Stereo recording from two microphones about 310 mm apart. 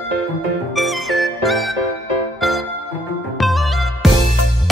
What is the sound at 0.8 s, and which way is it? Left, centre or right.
Music, centre.